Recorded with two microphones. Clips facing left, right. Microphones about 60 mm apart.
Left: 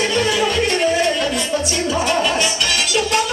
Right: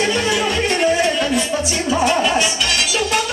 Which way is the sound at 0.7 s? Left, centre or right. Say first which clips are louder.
Right 1 dB; centre.